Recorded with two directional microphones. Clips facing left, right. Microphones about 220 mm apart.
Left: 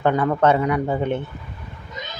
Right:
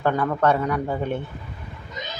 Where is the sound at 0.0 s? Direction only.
20° left (ahead or behind).